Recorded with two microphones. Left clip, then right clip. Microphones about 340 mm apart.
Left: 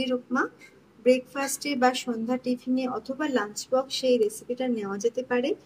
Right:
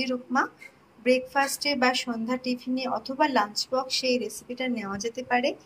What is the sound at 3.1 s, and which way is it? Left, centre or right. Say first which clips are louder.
Speech: right 6 dB; right.